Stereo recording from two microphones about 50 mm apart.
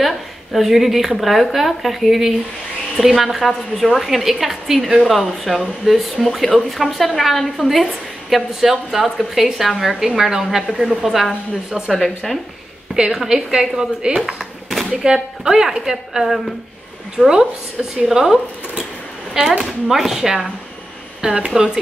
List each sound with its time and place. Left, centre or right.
0.0 s a woman's voice: centre
11.9 s a woman's voice: centre
12.9 s a woman's voice: centre
14.4 s a sound: centre
15.4 s speech: centre